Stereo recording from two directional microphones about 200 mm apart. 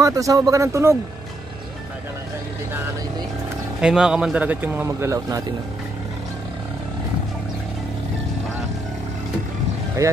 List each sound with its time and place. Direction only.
0.0 s speech: 15° right (ahead or behind)
3.8 s speech: 5° right (ahead or behind)